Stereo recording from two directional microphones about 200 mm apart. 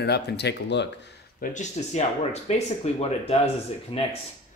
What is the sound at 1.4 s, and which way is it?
Speech, 35° left (ahead or behind).